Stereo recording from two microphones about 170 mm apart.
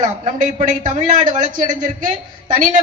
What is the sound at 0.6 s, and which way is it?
A man's voice, 50° right (ahead or behind).